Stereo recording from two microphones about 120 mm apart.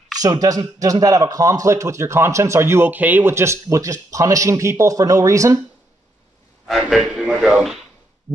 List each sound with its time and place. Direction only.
0.2 s a man's voice: 30° right (ahead or behind)
6.8 s a man's voice: centre (ahead or behind)